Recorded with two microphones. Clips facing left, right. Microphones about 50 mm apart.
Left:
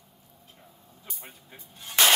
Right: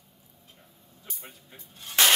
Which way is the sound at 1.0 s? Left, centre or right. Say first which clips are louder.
Even; centre.